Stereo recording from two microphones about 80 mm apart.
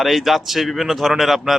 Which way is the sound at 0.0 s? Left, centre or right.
Centre.